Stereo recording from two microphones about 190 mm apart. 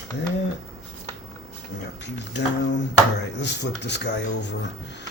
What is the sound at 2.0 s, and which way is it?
Speech, 65° left (ahead or behind).